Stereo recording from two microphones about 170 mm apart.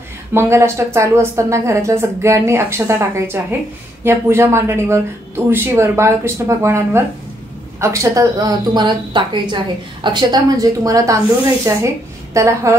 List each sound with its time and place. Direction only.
0.3 s a woman's voice: 15° right (ahead or behind)